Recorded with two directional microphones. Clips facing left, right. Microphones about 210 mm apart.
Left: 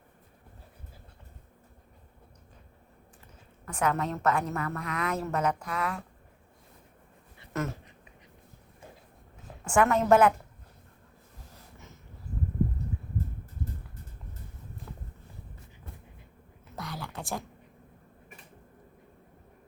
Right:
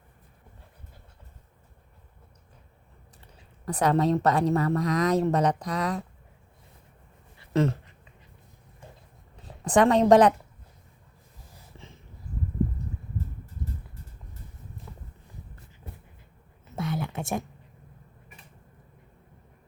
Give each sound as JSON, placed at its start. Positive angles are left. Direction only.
{"t": 3.7, "sound": "a woman's voice", "side_deg": -35}
{"t": 9.6, "sound": "a woman's voice", "side_deg": -35}
{"t": 14.9, "sound": "boat", "side_deg": 0}
{"t": 16.6, "sound": "a sound", "side_deg": -25}